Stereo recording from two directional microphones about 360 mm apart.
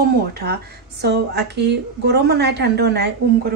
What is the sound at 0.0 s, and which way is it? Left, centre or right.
A woman's voice, right.